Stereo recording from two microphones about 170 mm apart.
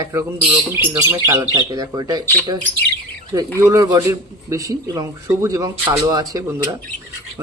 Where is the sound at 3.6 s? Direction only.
20° right (ahead or behind).